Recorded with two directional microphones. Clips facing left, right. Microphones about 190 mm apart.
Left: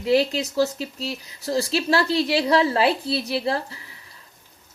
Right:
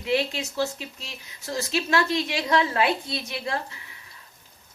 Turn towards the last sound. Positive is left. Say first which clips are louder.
# left 6 dB
turn(degrees=35)  # may be behind; listen again after turning